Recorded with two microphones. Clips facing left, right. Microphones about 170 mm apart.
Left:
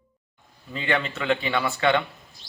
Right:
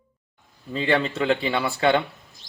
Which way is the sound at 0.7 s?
35° right (ahead or behind).